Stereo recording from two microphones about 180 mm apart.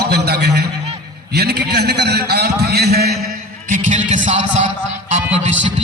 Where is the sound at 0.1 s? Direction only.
65° right (ahead or behind).